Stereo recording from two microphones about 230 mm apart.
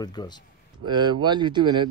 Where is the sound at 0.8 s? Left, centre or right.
Centre.